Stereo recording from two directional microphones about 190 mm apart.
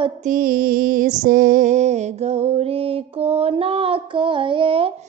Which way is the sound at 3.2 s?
30° right (ahead or behind).